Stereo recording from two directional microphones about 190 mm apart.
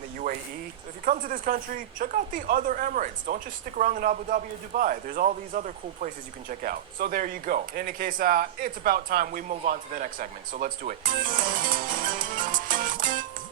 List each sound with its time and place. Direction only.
1.0 s speech: 45° right (ahead or behind)
12.0 s music: 45° right (ahead or behind)